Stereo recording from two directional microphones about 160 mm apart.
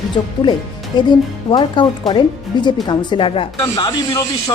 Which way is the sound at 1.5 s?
30° left (ahead or behind).